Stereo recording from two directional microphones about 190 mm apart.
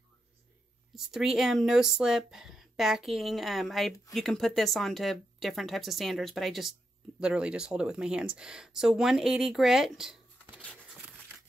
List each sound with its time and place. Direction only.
0.9 s speech: centre (ahead or behind)